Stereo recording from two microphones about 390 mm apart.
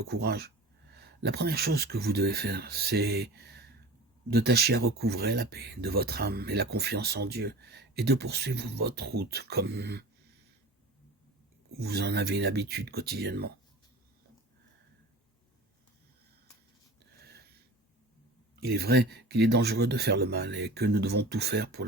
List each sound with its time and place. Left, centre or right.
0.0 s speech: right
11.7 s speech: right
18.6 s speech: right